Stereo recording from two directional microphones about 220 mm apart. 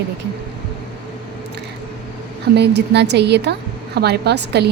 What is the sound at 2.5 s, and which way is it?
A woman's voice, 50° right (ahead or behind).